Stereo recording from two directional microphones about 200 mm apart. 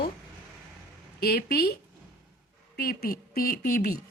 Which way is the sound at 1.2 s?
50° left (ahead or behind).